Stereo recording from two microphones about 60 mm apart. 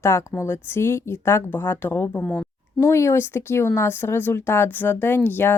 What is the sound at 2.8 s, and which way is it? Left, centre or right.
Speech, left.